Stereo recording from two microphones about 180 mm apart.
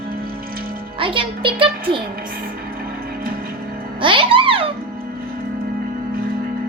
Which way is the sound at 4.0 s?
30° right (ahead or behind).